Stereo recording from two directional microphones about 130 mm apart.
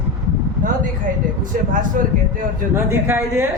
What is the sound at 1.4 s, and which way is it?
Speech, 90° right.